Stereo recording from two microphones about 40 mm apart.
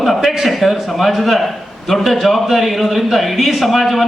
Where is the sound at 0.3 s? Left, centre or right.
Centre.